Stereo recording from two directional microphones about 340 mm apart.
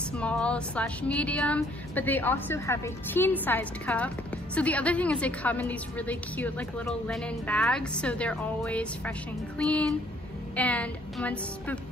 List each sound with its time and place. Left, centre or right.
0.2 s a woman's voice: centre